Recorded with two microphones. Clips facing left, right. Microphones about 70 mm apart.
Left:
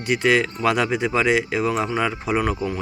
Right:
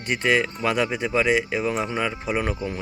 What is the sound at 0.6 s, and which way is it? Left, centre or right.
Speech, right.